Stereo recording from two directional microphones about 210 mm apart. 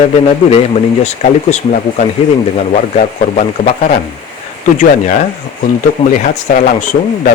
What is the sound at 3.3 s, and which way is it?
Speech, 35° left (ahead or behind).